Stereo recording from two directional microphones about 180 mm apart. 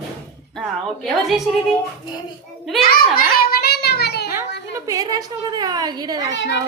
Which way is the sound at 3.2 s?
60° left (ahead or behind).